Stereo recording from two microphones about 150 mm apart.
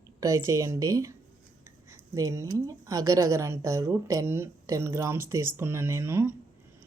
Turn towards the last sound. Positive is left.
turn(degrees=-15)  # may be behind; listen again after turning